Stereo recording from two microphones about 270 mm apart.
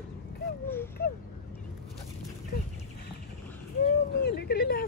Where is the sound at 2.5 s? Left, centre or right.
Left.